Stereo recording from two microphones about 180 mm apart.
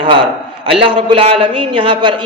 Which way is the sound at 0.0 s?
30° right (ahead or behind).